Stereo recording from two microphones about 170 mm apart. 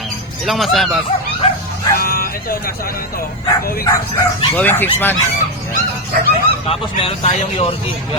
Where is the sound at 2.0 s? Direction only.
60° left (ahead or behind).